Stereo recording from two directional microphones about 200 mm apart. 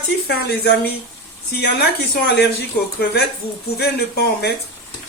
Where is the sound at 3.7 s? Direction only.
55° left (ahead or behind).